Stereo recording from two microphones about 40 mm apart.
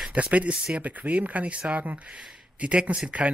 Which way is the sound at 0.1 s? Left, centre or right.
Right.